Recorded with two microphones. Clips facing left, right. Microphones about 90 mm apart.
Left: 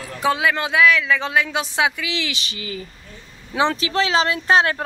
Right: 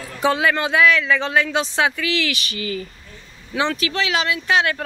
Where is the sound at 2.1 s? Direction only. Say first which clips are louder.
Right 4 dB; 25° left (ahead or behind).